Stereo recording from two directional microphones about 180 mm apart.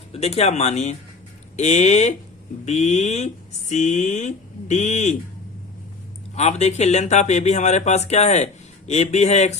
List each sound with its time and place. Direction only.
0.1 s speech: 35° left (ahead or behind)
6.3 s speech: 40° left (ahead or behind)